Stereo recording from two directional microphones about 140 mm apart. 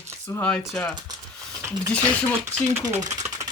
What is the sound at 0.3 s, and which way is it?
Speech, 10° left (ahead or behind).